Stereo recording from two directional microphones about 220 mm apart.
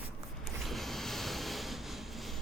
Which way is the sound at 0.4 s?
Centre (ahead or behind).